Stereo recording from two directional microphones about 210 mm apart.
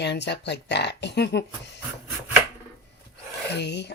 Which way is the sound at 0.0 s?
55° left (ahead or behind).